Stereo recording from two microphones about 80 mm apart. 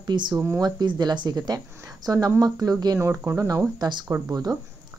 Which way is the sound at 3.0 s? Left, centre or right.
Right.